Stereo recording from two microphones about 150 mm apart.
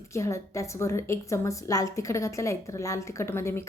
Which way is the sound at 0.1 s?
20° left (ahead or behind).